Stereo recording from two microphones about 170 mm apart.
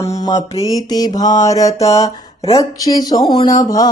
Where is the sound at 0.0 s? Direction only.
20° left (ahead or behind).